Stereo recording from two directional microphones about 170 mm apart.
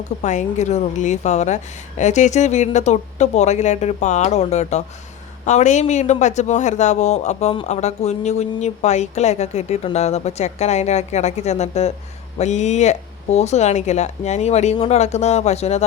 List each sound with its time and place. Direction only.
0.2 s a woman's voice: 45° left (ahead or behind)